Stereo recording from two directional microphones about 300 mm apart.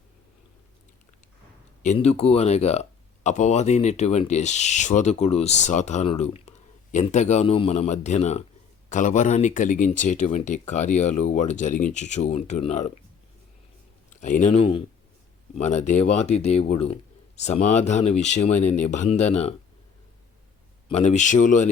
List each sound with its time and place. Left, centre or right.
1.8 s speech: left
14.2 s speech: left
20.8 s speech: left